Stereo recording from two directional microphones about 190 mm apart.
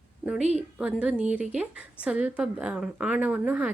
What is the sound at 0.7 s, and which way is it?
A woman's voice, 5° right (ahead or behind).